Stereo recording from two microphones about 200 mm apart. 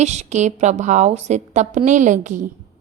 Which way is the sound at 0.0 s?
35° right (ahead or behind).